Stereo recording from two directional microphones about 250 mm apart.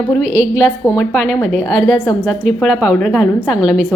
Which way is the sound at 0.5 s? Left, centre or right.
Centre.